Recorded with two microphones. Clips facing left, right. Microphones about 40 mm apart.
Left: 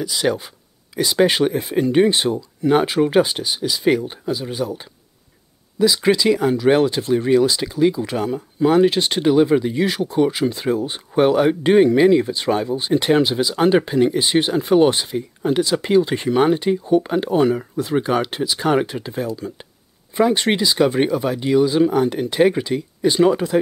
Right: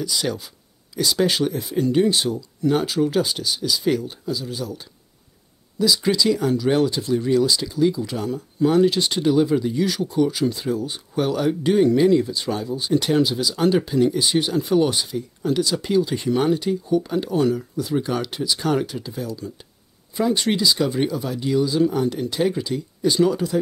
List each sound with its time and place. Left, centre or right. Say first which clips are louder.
0.0 s speech: left 5 dB; left
5.9 s speech: left 4 dB; left